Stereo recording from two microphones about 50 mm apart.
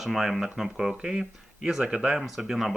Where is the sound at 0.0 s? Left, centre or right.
Centre.